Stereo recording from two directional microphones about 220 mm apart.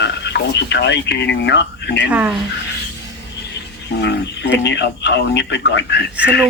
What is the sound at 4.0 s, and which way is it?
Speech, 50° left (ahead or behind).